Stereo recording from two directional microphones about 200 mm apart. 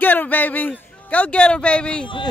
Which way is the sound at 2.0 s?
25° left (ahead or behind).